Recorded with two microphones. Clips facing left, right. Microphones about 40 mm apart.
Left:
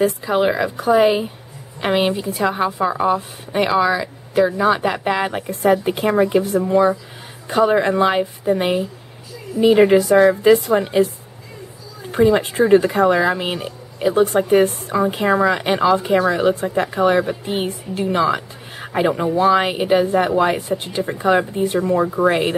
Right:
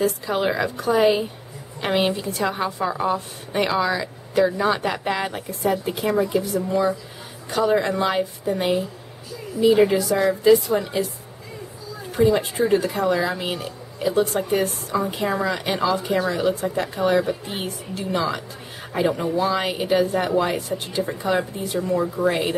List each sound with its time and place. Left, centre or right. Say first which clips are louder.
0.0 s a woman's voice: left 5 dB; centre
5.5 s a woman's voice: left 7 dB; left
9.6 s speech: left 4 dB; left
12.1 s a woman's voice: left 4 dB; left